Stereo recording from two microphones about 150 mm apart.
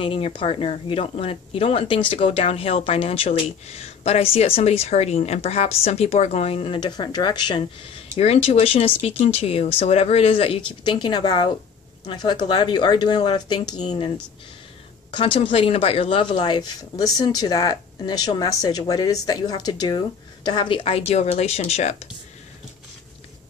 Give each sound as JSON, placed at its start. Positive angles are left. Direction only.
{"t": 0.0, "sound": "speech", "side_deg": 35}
{"t": 8.2, "sound": "speech", "side_deg": 45}
{"t": 15.0, "sound": "a woman's voice", "side_deg": 35}